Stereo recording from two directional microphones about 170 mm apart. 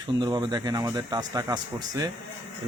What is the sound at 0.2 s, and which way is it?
Speech, 25° right (ahead or behind).